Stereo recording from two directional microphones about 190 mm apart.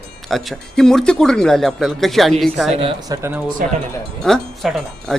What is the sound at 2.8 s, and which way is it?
Speech, 25° right (ahead or behind).